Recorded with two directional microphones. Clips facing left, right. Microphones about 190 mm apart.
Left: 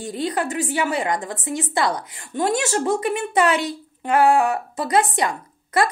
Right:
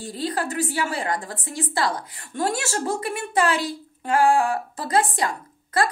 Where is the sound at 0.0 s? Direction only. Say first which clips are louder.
Left 3 dB; 20° left (ahead or behind).